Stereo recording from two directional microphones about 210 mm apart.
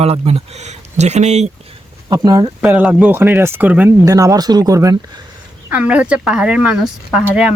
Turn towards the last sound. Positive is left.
turn(degrees=-5)  # may be behind; listen again after turning